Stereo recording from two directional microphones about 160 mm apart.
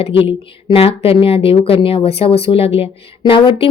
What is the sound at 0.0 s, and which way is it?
A woman's voice, 35° left (ahead or behind).